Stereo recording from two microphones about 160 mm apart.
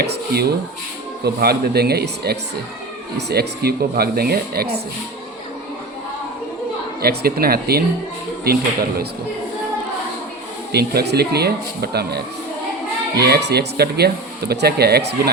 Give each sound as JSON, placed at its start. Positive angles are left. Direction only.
{"t": 0.0, "sound": "speech", "side_deg": -90}
{"t": 1.2, "sound": "speech", "side_deg": -80}
{"t": 7.0, "sound": "speech", "side_deg": -80}
{"t": 10.7, "sound": "speech", "side_deg": -90}